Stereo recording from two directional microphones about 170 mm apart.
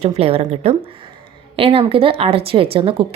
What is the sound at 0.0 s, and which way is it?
Speech, 35° right (ahead or behind).